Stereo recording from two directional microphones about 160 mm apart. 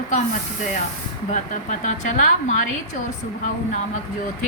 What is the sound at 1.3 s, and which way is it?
A woman's voice, 50° left (ahead or behind).